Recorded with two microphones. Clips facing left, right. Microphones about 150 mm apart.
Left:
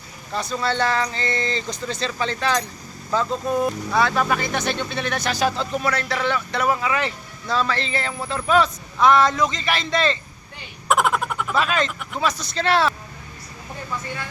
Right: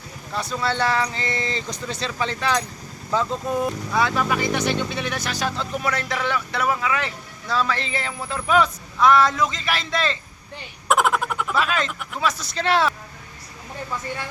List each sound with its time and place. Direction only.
0.4 s speech: 10° right (ahead or behind)
3.4 s speech: 20° left (ahead or behind)
3.9 s speech: 10° right (ahead or behind)
5.8 s a man's voice: 15° right (ahead or behind)